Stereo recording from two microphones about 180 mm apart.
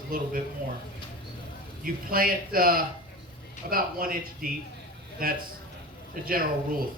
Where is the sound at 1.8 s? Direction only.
55° right (ahead or behind).